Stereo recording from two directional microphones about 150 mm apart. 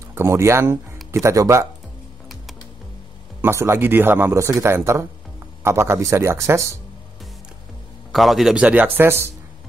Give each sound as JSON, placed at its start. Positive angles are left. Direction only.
{"t": 0.1, "sound": "speech", "side_deg": -15}
{"t": 3.3, "sound": "speech", "side_deg": -15}
{"t": 8.1, "sound": "speech", "side_deg": 0}